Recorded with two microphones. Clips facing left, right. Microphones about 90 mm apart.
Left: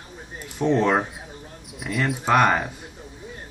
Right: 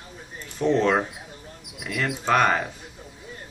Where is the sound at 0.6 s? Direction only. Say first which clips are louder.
Left 1 dB; 15° left (ahead or behind).